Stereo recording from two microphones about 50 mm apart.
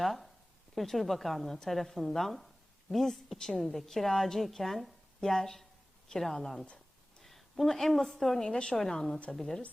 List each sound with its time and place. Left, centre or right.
0.0 s a woman's voice: centre
7.2 s a sound: centre
8.2 s a woman's voice: centre
8.4 s a woman's voice: centre
8.8 s a woman's voice: centre